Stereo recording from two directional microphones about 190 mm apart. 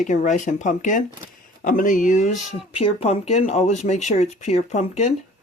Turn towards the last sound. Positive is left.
turn(degrees=35)  # may be behind; listen again after turning